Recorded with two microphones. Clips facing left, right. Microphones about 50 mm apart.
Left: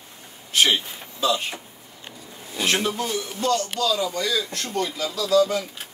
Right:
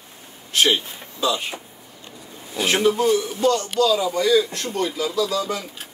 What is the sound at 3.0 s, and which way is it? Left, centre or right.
A man's voice, centre.